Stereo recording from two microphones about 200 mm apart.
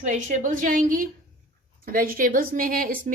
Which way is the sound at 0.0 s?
40° right (ahead or behind).